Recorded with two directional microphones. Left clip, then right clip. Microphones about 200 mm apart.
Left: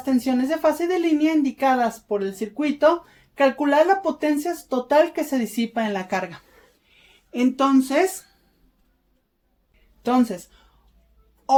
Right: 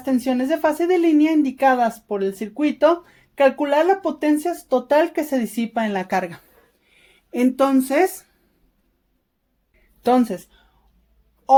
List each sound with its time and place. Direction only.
0.0 s speech: 45° right (ahead or behind)
6.9 s a sound: 45° right (ahead or behind)
10.0 s speech: 45° right (ahead or behind)